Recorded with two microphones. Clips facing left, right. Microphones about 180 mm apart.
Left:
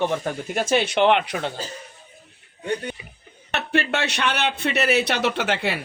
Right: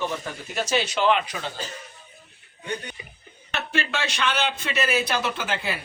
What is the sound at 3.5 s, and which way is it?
A man's voice, 65° left (ahead or behind).